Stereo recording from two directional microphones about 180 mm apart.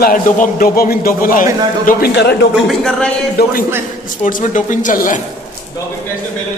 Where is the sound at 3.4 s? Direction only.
60° left (ahead or behind).